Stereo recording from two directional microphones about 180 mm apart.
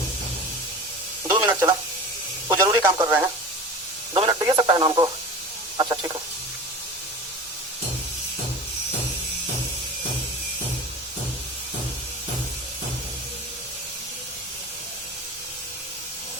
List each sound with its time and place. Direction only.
1.3 s radio: 15° right (ahead or behind)
2.6 s speech: 20° right (ahead or behind)
4.1 s speech: 25° right (ahead or behind)
5.7 s a sound: 20° right (ahead or behind)